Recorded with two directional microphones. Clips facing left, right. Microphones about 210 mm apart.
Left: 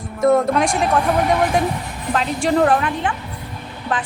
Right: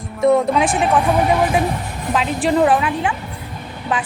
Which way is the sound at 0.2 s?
Centre (ahead or behind).